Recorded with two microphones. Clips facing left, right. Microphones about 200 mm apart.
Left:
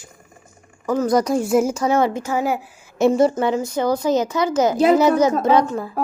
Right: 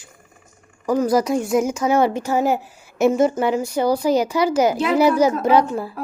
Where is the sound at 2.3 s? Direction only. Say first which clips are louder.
Right 2 dB; 40° right (ahead or behind).